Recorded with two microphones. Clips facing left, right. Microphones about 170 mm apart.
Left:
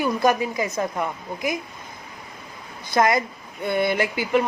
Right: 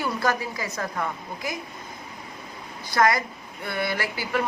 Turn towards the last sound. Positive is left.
turn(degrees=20)  # may be behind; listen again after turning